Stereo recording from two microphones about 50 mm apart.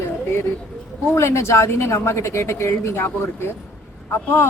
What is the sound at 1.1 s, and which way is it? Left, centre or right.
A woman's voice, left.